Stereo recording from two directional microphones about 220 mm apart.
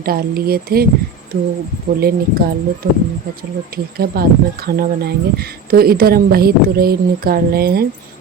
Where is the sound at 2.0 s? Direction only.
45° right (ahead or behind).